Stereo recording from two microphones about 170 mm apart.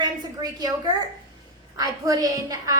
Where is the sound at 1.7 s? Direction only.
20° right (ahead or behind).